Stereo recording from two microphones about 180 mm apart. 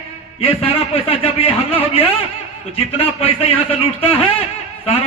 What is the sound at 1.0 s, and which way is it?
A man's voice, 30° left (ahead or behind).